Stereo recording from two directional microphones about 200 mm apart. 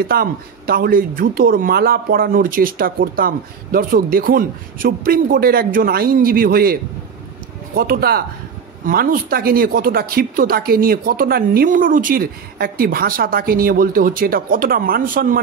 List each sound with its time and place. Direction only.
0.1 s speech: 50° right (ahead or behind)